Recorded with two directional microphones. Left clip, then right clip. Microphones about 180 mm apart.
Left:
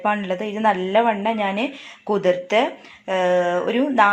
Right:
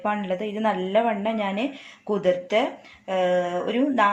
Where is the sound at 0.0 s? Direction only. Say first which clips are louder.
Left 4 dB; 25° left (ahead or behind).